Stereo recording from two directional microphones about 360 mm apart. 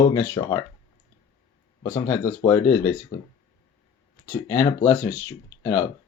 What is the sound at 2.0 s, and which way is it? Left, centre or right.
Speech, centre.